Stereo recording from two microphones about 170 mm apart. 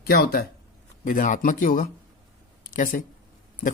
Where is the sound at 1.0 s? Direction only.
50° left (ahead or behind).